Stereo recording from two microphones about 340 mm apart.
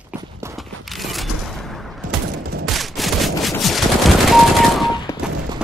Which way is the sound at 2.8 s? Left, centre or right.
Centre.